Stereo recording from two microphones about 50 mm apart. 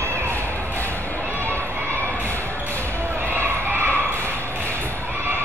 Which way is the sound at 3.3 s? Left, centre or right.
Right.